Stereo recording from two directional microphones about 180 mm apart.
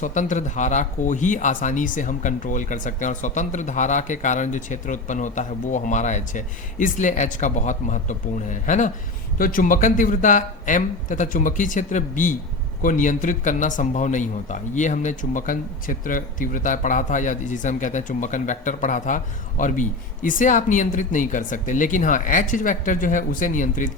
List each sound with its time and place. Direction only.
0.0 s speech: 45° left (ahead or behind)